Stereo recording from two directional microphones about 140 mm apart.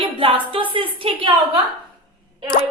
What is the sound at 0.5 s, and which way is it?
Speech, 40° right (ahead or behind).